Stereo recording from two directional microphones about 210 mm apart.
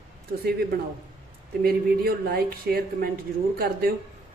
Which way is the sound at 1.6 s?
45° right (ahead or behind).